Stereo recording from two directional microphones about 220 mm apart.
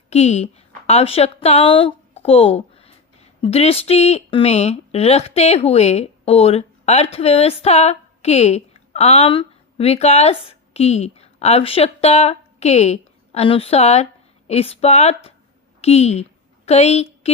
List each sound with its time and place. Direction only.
0.1 s a woman's voice: 30° left (ahead or behind)